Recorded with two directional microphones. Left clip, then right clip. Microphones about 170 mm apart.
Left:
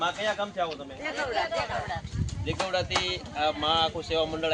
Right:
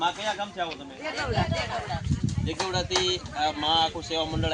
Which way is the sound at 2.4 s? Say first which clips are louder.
Left 1 dB; 30° left (ahead or behind).